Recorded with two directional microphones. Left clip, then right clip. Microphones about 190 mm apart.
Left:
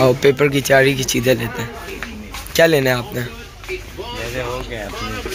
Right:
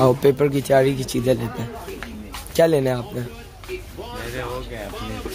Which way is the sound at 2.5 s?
15° right (ahead or behind).